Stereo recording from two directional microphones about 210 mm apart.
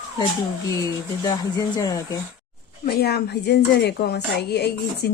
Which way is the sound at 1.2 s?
15° left (ahead or behind).